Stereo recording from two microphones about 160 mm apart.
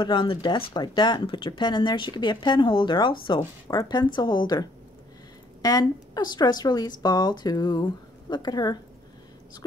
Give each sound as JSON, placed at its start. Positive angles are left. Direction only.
{"t": 0.0, "sound": "speech", "side_deg": 30}